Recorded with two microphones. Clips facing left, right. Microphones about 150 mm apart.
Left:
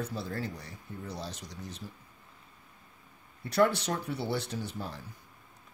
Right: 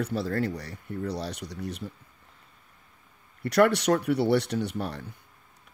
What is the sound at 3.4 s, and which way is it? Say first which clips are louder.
Speech: right 6 dB; 70° right (ahead or behind).